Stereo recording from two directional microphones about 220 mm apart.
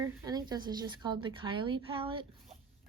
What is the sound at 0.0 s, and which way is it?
A woman's voice, 15° right (ahead or behind).